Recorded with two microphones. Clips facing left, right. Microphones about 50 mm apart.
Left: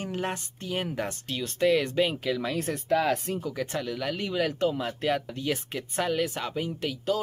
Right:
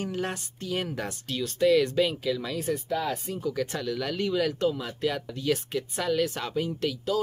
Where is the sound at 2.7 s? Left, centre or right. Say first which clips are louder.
Left 4 dB; left.